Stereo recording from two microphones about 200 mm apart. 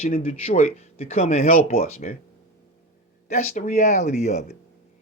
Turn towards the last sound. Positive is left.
turn(degrees=35)  # may be behind; listen again after turning